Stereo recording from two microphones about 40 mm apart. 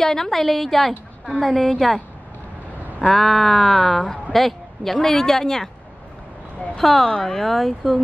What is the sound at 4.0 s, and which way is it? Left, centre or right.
Speech, centre.